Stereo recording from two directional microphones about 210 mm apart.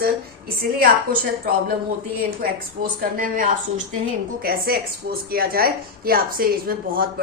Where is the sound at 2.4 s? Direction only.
45° right (ahead or behind).